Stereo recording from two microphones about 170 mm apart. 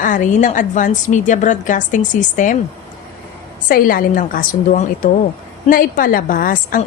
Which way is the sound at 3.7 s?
55° left (ahead or behind).